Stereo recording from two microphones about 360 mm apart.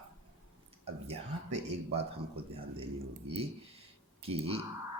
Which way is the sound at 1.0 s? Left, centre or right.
Centre.